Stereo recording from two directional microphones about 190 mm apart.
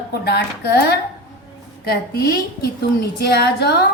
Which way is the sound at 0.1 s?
60° left (ahead or behind).